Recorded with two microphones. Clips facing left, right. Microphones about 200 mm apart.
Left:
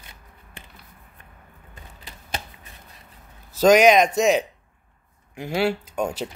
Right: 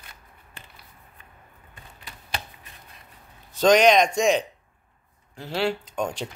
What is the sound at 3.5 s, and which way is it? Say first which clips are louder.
Speech: left 2 dB; 5° left (ahead or behind).